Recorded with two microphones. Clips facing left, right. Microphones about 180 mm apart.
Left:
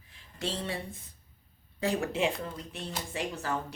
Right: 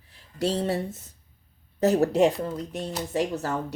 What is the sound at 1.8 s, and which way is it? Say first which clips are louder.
Speech: right 9 dB; 40° right (ahead or behind).